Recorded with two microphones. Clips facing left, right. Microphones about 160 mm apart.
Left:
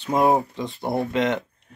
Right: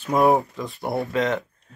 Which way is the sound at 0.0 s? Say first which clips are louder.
Right 1 dB; 20° left (ahead or behind).